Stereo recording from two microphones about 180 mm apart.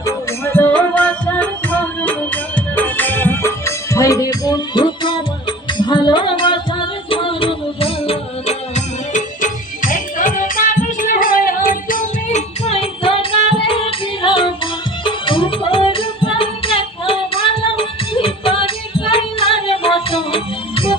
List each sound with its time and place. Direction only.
0.0 s music: 15° left (ahead or behind); by 12.4 s 50° left (ahead or behind)
12.6 s music: 35° left (ahead or behind)